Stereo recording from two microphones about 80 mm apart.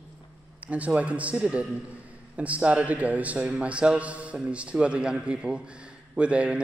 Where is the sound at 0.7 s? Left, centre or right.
Centre.